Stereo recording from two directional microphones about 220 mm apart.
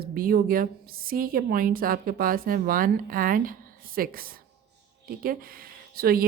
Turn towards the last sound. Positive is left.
turn(degrees=-45)  # may be behind; listen again after turning